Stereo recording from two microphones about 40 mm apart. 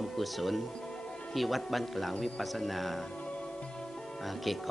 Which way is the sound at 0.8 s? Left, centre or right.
Centre.